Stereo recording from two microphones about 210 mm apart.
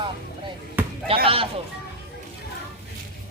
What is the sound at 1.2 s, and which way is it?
Speech, 25° right (ahead or behind).